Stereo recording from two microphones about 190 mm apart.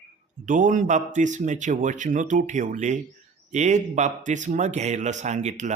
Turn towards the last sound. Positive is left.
turn(degrees=-40)  # may be behind; listen again after turning